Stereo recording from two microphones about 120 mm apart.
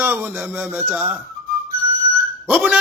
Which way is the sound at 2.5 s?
10° right (ahead or behind).